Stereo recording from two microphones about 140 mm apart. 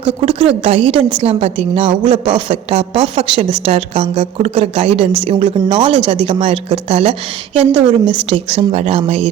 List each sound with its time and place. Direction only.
0.3 s a woman's voice: 40° right (ahead or behind)
7.6 s a woman's voice: 10° right (ahead or behind)
8.3 s speech: 45° right (ahead or behind)